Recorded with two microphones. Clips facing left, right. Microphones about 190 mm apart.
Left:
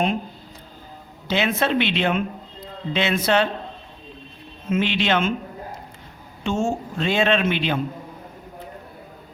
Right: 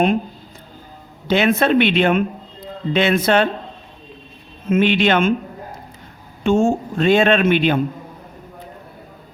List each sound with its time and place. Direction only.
1.3 s a woman's voice: 55° right (ahead or behind)
4.7 s a man's voice: 55° right (ahead or behind)
6.4 s a man's voice: 55° right (ahead or behind)